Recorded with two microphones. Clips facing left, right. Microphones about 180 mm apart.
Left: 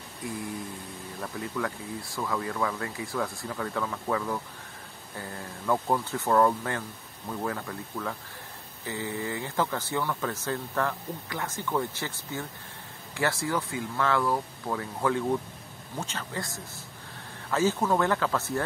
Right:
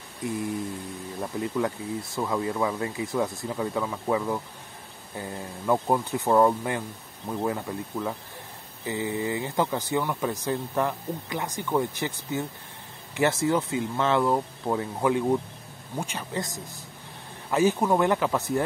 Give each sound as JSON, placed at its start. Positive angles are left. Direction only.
{"t": 1.2, "sound": "speech", "side_deg": -20}